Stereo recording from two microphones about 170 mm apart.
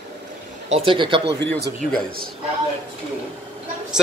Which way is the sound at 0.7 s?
35° right (ahead or behind).